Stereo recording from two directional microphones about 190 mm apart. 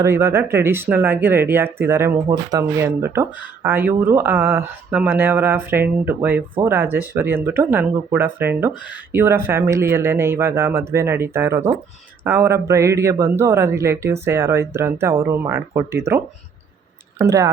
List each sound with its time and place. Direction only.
0.0 s speech: 15° right (ahead or behind)